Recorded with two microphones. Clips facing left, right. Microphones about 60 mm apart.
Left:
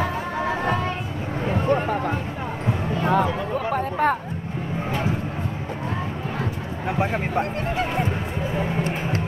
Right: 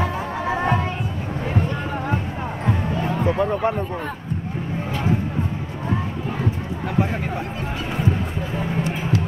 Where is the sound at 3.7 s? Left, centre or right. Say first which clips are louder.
Left 5 dB; left.